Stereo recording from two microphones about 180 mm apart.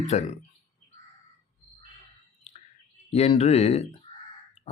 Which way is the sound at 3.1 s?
35° left (ahead or behind).